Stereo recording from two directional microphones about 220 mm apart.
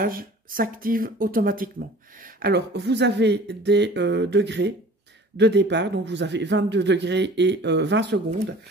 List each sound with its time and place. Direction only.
0.0 s a man's voice: 40° right (ahead or behind)